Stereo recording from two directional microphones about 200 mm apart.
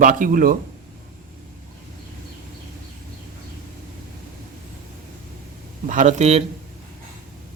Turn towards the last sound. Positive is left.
turn(degrees=-35)  # may be behind; listen again after turning